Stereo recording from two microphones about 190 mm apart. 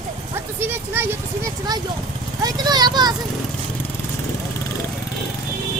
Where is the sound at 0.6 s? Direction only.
10° right (ahead or behind).